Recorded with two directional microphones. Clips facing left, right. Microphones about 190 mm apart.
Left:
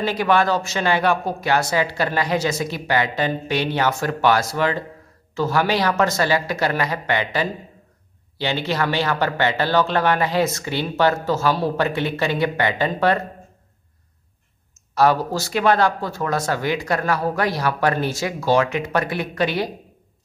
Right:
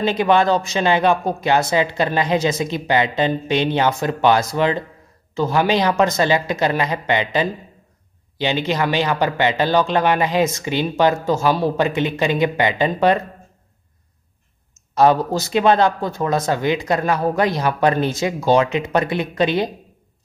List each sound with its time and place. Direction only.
0.0 s speech: 20° right (ahead or behind)
15.0 s speech: 20° right (ahead or behind)